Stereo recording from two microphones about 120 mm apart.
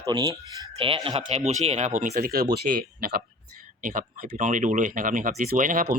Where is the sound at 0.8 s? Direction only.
50° right (ahead or behind).